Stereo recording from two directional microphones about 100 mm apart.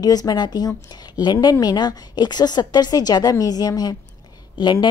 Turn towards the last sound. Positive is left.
turn(degrees=50)  # may be behind; listen again after turning